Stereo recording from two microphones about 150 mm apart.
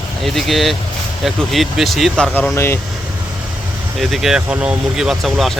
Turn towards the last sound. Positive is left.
turn(degrees=0)  # may be behind; listen again after turning